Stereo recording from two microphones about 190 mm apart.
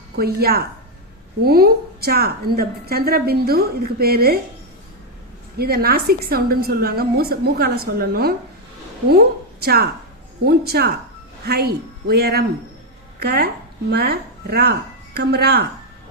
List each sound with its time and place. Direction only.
0.2 s a woman's voice: 55° right (ahead or behind)
5.5 s a woman's voice: 55° right (ahead or behind)